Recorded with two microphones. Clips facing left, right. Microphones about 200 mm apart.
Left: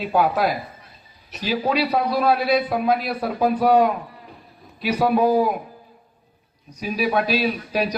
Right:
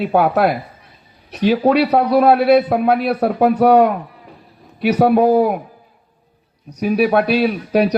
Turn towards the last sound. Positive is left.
turn(degrees=-60)  # may be behind; listen again after turning